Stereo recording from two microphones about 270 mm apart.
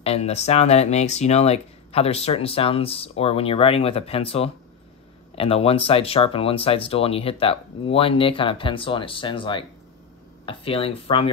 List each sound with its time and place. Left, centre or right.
0.0 s speech: left